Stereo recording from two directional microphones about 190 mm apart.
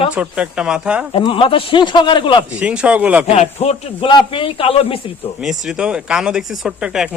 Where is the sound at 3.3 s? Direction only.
35° left (ahead or behind).